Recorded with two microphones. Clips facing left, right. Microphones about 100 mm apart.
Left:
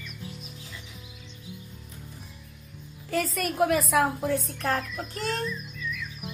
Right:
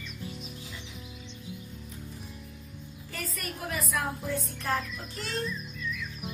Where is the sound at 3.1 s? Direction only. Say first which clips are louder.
Left 11 dB; 90° left.